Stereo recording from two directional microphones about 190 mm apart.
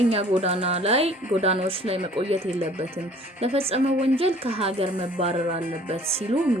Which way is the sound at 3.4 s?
30° right (ahead or behind).